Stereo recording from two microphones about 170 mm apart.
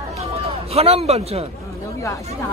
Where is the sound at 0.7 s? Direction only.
35° right (ahead or behind).